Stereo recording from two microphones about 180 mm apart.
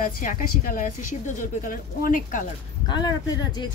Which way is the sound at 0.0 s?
50° left (ahead or behind).